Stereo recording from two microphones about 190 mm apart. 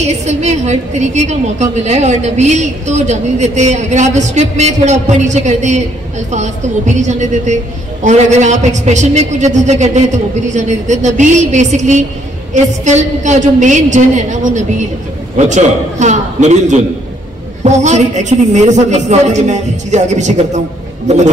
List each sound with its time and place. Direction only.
0.0 s a woman's voice: 35° right (ahead or behind)